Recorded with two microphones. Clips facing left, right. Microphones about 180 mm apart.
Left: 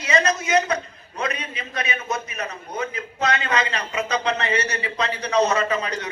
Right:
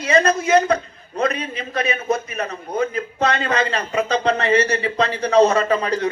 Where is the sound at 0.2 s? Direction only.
55° right (ahead or behind).